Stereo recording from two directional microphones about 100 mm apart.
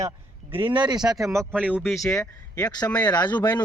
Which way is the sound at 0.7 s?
50° right (ahead or behind).